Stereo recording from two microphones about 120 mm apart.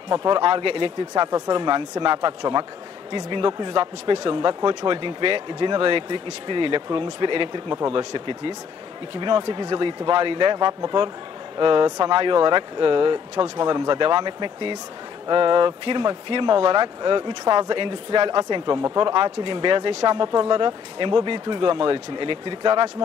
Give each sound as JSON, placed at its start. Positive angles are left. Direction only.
{"t": 0.1, "sound": "speech", "side_deg": -35}